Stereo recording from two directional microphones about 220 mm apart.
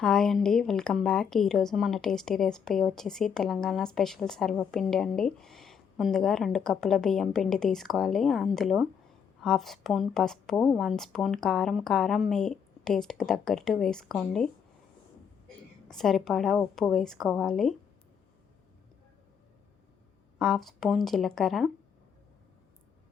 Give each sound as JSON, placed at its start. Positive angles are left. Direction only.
{"t": 0.0, "sound": "a woman's voice", "side_deg": 5}
{"t": 15.9, "sound": "a woman's voice", "side_deg": 0}
{"t": 20.4, "sound": "a woman's voice", "side_deg": 0}